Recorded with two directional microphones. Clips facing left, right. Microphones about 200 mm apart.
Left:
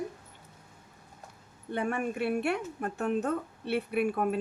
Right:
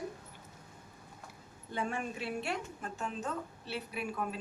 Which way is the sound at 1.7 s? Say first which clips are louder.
Left 6 dB; 60° left (ahead or behind).